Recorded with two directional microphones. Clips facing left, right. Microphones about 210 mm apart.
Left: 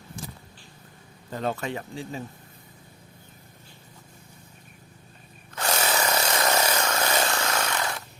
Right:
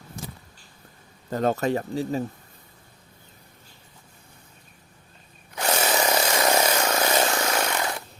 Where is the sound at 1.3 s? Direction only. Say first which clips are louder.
Right 6 dB; 45° right (ahead or behind).